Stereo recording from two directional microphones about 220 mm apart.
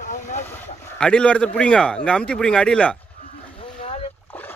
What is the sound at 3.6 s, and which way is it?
Boat, 25° left (ahead or behind).